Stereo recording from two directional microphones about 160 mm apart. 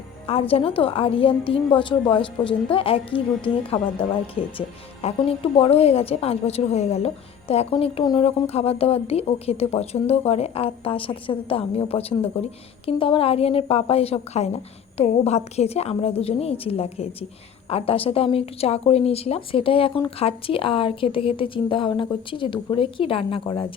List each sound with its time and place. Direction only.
0.3 s a woman's voice: 35° left (ahead or behind)